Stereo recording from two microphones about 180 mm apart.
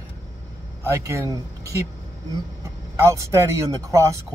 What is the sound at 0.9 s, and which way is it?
Speech, 15° right (ahead or behind).